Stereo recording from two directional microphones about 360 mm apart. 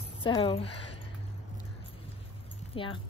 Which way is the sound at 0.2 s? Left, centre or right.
Centre.